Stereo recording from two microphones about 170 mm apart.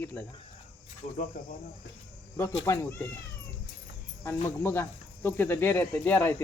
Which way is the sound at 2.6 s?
15° left (ahead or behind).